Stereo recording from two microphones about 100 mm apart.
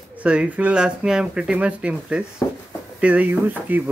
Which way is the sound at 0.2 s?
10° right (ahead or behind).